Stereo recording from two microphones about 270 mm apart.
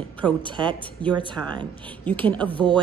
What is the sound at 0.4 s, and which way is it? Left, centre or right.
Speech, centre.